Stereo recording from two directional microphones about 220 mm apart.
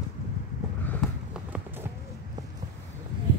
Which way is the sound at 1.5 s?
10° right (ahead or behind).